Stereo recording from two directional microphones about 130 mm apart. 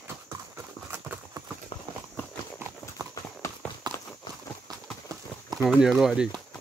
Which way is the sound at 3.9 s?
30° right (ahead or behind).